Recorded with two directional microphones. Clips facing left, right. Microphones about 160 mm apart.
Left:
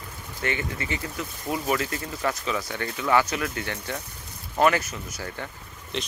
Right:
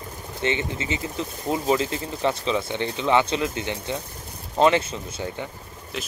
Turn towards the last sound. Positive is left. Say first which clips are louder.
# left 1 dB
turn(degrees=-5)  # may be behind; listen again after turning